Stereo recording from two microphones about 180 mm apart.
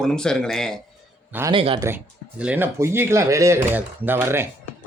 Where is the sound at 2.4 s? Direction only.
10° right (ahead or behind).